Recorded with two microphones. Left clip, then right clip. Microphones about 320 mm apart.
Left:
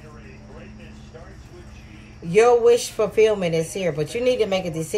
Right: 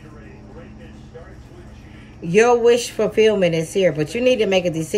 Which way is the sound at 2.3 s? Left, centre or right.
Left.